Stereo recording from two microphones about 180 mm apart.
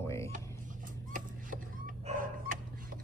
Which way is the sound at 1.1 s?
50° right (ahead or behind).